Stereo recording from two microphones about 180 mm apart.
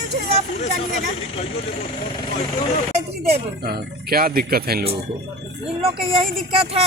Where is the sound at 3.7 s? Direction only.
55° right (ahead or behind).